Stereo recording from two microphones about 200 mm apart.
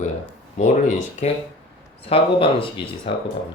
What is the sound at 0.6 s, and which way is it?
Speech, 35° left (ahead or behind).